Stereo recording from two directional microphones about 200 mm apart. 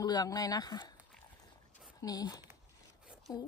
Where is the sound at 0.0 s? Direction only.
20° left (ahead or behind).